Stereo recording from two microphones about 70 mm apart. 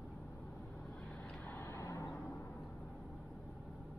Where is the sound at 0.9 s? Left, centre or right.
Centre.